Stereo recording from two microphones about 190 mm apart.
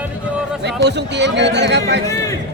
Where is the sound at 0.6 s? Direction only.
65° right (ahead or behind).